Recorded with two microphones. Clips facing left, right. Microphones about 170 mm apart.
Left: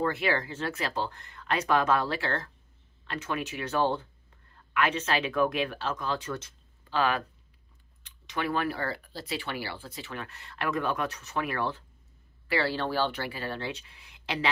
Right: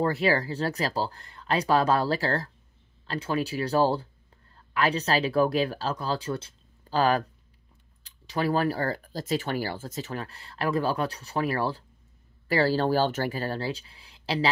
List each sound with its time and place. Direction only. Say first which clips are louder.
0.0 s speech: right 4 dB; 35° right (ahead or behind)